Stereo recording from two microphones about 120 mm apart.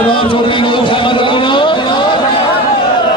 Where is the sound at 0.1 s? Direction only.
45° left (ahead or behind).